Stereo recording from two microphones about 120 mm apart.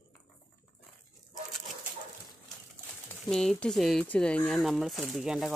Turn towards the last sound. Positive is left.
turn(degrees=-5)  # may be behind; listen again after turning